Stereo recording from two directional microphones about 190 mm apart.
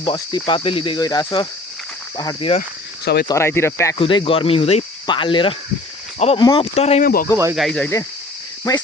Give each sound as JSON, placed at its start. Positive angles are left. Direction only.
{"t": 0.0, "sound": "speech", "side_deg": 25}
{"t": 2.6, "sound": "cricket", "side_deg": 60}
{"t": 3.2, "sound": "speech", "side_deg": 15}
{"t": 3.9, "sound": "speech", "side_deg": 30}
{"t": 6.4, "sound": "speech", "side_deg": 20}
{"t": 6.7, "sound": "speech", "side_deg": 35}
{"t": 7.0, "sound": "speech", "side_deg": 50}
{"t": 7.5, "sound": "speech", "side_deg": 0}
{"t": 8.7, "sound": "speech", "side_deg": 20}